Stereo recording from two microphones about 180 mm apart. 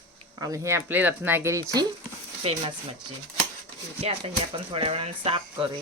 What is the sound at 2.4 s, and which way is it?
Speech, 35° right (ahead or behind).